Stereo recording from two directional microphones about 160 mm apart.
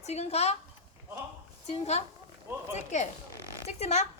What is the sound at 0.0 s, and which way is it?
Speech, 45° left (ahead or behind).